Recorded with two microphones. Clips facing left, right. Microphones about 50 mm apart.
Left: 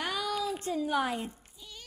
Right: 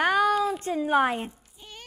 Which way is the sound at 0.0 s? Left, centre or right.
Right.